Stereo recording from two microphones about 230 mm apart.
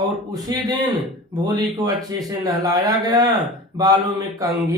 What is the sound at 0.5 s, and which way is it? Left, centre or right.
A man's voice, centre.